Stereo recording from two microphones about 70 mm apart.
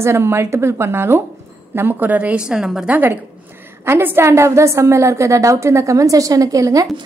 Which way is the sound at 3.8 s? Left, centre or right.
Right.